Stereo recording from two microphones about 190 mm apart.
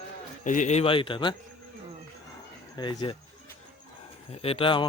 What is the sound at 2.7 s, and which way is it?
Speech, 20° left (ahead or behind).